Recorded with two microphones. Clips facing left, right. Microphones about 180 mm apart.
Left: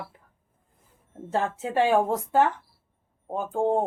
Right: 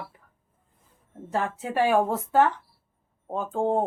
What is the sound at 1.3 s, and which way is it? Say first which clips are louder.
Speech: left 1 dB; 25° left (ahead or behind).